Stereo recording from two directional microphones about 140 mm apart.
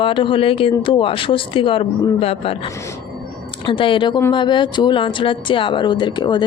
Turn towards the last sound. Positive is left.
turn(degrees=35)  # may be behind; listen again after turning